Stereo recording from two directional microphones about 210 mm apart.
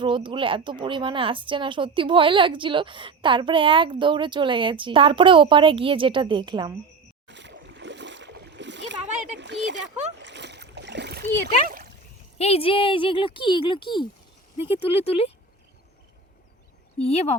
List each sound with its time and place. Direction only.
0.0 s speech: 25° right (ahead or behind)
7.3 s a sound: 60° right (ahead or behind)
9.4 s splash: 60° right (ahead or behind)
12.4 s speech: 30° left (ahead or behind)
17.0 s speech: 30° left (ahead or behind)